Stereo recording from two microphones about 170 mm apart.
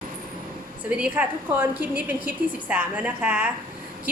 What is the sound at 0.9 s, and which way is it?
A woman's voice, 5° right (ahead or behind).